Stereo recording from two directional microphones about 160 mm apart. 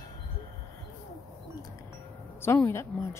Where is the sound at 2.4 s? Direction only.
15° left (ahead or behind).